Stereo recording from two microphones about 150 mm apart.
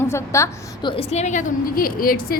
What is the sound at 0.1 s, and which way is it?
Speech, 20° left (ahead or behind).